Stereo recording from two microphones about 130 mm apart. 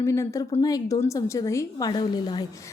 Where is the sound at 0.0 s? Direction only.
20° left (ahead or behind).